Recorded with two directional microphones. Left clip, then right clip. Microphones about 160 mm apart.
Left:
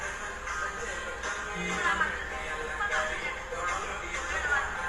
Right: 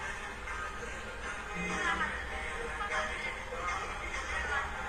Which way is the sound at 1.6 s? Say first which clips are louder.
Left 4 dB; 20° left (ahead or behind).